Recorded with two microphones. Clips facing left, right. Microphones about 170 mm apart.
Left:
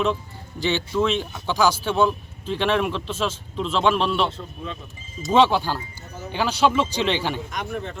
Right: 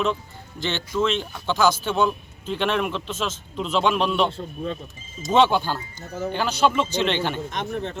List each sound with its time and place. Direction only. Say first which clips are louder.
0.6 s speech: left 2 dB; 5° left (ahead or behind)
4.3 s speech: right 4 dB; 35° right (ahead or behind)
5.3 s speech: left 1 dB; 5° left (ahead or behind)
7.5 s speech: right 1 dB; 30° right (ahead or behind)